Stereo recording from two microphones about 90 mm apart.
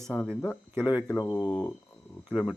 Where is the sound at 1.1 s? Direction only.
30° left (ahead or behind).